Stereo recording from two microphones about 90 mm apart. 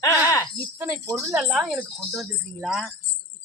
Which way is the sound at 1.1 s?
30° right (ahead or behind).